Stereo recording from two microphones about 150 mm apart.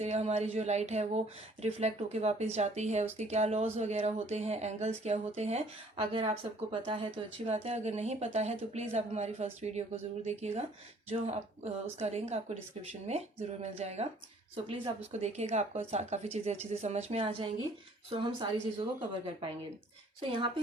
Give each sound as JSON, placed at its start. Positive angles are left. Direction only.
{"t": 0.0, "sound": "speech", "side_deg": -45}
{"t": 15.2, "sound": "speech", "side_deg": -45}